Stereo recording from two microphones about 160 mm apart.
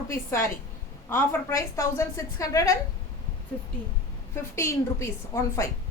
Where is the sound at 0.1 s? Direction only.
15° left (ahead or behind).